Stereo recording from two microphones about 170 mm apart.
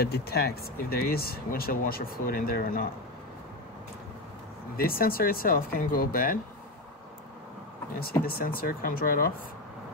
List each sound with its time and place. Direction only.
0.0 s speech: 70° left (ahead or behind)
4.7 s speech: 60° left (ahead or behind)
8.0 s speech: 60° left (ahead or behind)